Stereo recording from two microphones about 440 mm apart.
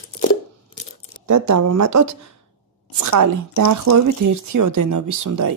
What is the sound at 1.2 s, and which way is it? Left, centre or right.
Speech, right.